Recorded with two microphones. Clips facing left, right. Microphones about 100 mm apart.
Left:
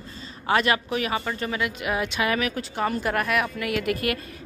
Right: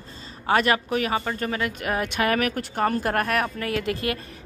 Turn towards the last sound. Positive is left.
turn(degrees=-30)  # may be behind; listen again after turning